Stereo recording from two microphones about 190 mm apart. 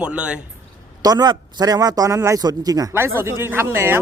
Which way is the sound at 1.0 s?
20° right (ahead or behind).